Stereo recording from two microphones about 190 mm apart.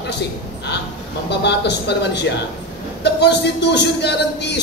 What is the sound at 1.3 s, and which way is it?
Speech, 60° left (ahead or behind).